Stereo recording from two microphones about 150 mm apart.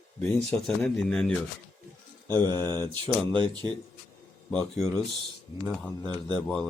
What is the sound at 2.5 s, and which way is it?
Speech, 15° left (ahead or behind).